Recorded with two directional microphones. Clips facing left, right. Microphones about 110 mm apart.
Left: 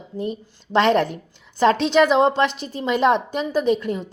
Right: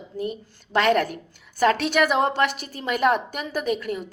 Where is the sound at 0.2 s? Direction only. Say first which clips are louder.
Left 2 dB; 25° left (ahead or behind).